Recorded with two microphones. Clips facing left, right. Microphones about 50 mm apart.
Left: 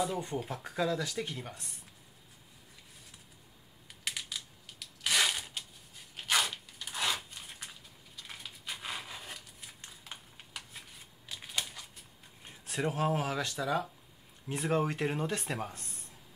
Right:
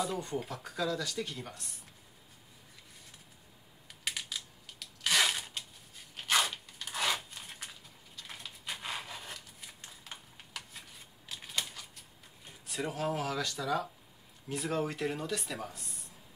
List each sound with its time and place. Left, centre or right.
0.0 s speech: centre
0.7 s speech: left
4.1 s a sound: centre
7.3 s crushing: centre
8.3 s a sound: centre
11.2 s typewriter: centre
12.6 s speech: left